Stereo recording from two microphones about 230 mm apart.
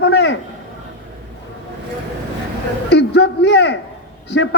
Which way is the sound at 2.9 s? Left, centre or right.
Left.